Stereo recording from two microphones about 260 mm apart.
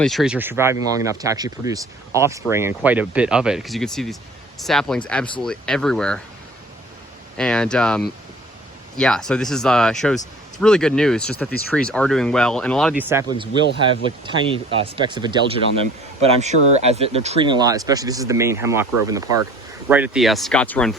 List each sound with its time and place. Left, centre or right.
0.0 s speech: centre
7.3 s speech: centre